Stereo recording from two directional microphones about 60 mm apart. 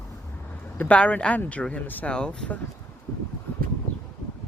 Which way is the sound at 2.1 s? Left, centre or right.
Centre.